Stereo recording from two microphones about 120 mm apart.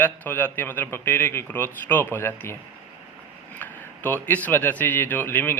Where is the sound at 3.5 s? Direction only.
15° left (ahead or behind).